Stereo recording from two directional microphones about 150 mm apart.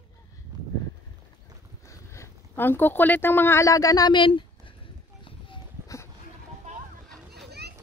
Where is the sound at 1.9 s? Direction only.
20° left (ahead or behind).